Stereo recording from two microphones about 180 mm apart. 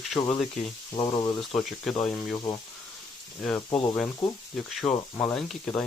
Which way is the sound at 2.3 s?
20° left (ahead or behind).